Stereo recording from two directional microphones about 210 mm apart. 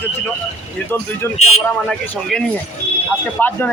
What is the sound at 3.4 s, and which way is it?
Speech, 10° left (ahead or behind).